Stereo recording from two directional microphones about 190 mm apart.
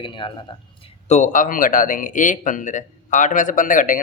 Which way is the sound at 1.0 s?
40° left (ahead or behind).